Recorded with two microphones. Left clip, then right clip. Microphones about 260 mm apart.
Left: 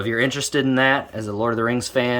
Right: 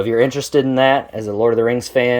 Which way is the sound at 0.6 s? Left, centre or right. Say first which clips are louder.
Right 2 dB; left.